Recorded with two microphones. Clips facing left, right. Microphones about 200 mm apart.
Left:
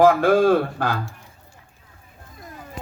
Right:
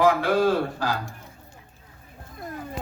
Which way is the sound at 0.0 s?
50° left (ahead or behind).